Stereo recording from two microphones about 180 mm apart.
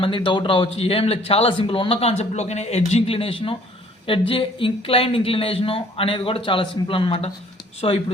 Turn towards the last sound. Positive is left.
turn(degrees=35)  # may be behind; listen again after turning